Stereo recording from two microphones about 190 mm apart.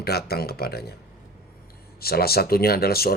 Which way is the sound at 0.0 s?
55° left (ahead or behind).